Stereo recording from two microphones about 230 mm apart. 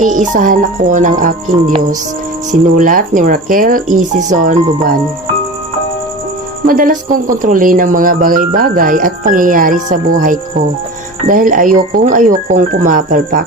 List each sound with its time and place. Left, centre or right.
0.0 s speech: right
6.7 s speech: right